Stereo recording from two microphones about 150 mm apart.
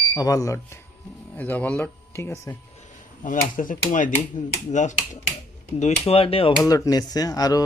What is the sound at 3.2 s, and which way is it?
Speech, 60° left (ahead or behind).